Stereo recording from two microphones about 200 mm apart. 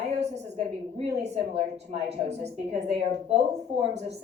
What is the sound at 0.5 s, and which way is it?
A woman's voice, 30° right (ahead or behind).